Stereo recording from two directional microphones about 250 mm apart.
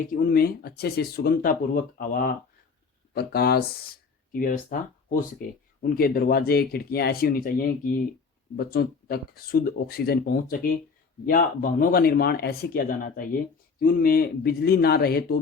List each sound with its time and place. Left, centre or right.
0.0 s speech: left